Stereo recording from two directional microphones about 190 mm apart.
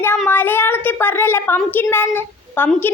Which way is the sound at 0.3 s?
10° left (ahead or behind).